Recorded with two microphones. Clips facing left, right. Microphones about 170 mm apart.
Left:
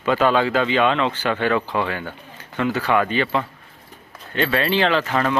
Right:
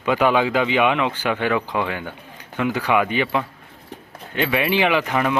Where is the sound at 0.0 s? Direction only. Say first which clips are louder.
Even; 15° right (ahead or behind).